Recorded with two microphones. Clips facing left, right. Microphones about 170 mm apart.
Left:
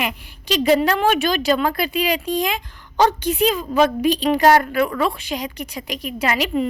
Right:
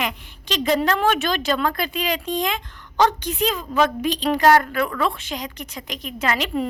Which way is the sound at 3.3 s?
15° left (ahead or behind).